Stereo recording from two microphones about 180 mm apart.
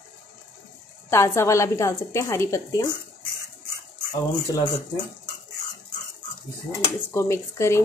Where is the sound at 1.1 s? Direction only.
15° left (ahead or behind).